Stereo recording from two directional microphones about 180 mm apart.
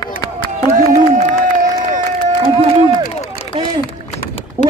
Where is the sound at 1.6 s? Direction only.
45° right (ahead or behind).